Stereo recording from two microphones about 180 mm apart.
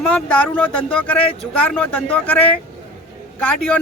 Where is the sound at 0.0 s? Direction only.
5° left (ahead or behind).